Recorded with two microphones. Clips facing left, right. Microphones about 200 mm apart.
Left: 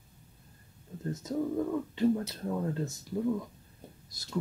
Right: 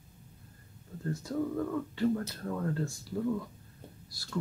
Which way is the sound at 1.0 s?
20° left (ahead or behind).